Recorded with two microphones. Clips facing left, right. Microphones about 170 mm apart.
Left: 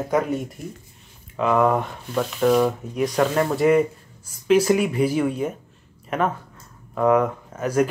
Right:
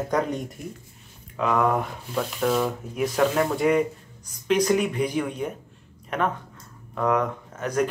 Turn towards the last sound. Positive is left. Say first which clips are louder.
# left 4 dB
turn(degrees=10)  # may be behind; listen again after turning